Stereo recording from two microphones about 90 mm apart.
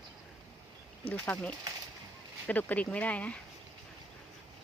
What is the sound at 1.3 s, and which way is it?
A woman's voice, 15° left (ahead or behind).